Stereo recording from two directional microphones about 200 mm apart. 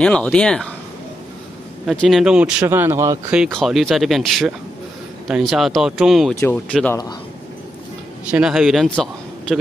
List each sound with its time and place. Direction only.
0.0 s a man's voice: 5° left (ahead or behind)
1.9 s a man's voice: centre (ahead or behind)
3.3 s a man's voice: centre (ahead or behind)
6.3 s a man's voice: 10° left (ahead or behind)
8.3 s a man's voice: 5° right (ahead or behind)